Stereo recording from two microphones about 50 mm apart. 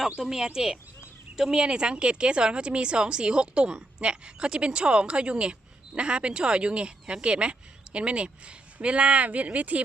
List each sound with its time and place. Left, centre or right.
0.2 s speech: centre; by 9.8 s right